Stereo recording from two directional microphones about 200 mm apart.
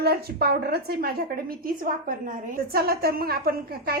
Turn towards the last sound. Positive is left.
turn(degrees=-50)  # may be behind; listen again after turning